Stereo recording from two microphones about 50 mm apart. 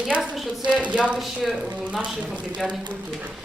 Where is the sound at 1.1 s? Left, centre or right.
Centre.